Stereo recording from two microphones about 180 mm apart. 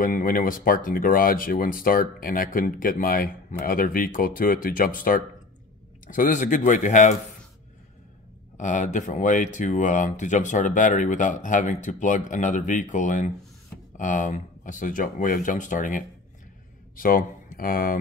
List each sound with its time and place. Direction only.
0.0 s speech: 50° left (ahead or behind)
8.5 s speech: 45° left (ahead or behind)